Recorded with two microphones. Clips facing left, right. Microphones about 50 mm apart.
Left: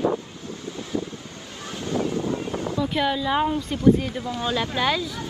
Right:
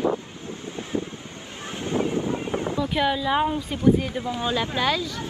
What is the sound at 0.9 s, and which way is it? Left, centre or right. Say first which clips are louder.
Vehicle: even; right.